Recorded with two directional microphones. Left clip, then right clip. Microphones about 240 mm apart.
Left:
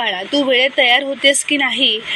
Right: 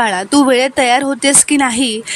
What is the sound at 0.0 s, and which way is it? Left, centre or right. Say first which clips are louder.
Speech: right 5 dB; right.